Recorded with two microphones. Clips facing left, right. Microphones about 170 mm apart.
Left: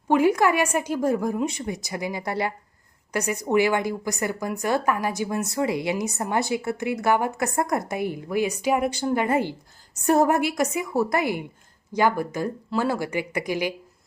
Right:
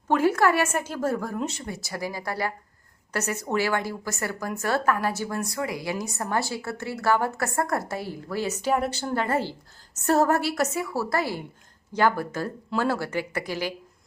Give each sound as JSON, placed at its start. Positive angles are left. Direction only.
{"t": 0.1, "sound": "a woman's voice", "side_deg": 15}